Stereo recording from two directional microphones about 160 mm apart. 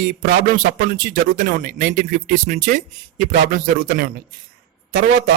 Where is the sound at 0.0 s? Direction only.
65° right (ahead or behind).